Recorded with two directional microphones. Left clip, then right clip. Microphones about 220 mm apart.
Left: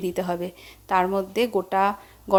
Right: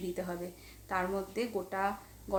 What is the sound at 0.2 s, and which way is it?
A woman's voice, 40° left (ahead or behind).